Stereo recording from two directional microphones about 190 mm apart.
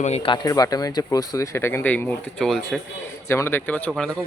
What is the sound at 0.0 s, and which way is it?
A man's voice, 30° left (ahead or behind).